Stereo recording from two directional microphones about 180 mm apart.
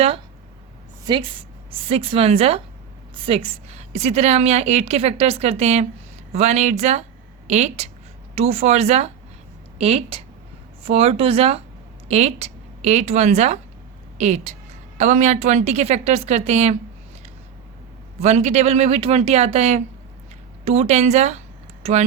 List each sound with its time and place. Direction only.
1.0 s a woman's voice: 30° right (ahead or behind)
18.2 s a woman's voice: 40° right (ahead or behind)